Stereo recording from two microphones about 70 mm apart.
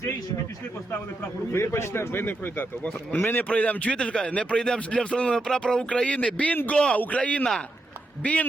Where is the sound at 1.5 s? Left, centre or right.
Left.